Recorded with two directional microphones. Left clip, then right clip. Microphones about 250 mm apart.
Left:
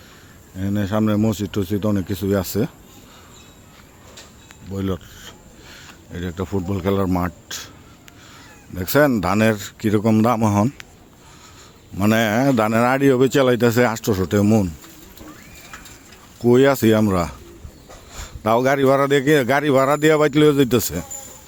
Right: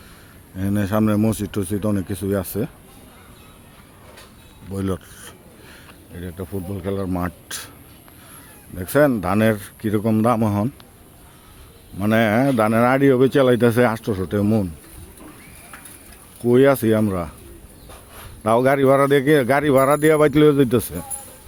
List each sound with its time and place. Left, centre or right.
0.5 s speech: centre
4.7 s speech: centre
6.1 s speech: left
7.1 s speech: centre
8.7 s speech: centre
11.9 s speech: centre
16.4 s speech: centre
18.4 s speech: centre